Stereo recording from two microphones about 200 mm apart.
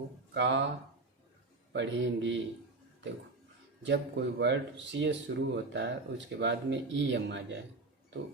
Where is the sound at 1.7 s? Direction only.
65° right (ahead or behind).